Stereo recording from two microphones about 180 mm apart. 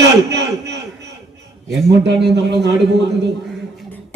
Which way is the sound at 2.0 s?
75° right (ahead or behind).